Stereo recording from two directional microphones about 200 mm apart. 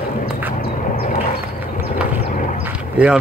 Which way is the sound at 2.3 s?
40° left (ahead or behind).